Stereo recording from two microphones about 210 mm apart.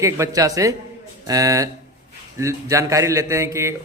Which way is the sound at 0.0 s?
15° right (ahead or behind).